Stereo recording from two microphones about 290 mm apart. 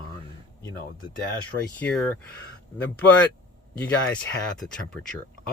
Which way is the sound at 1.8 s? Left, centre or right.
Centre.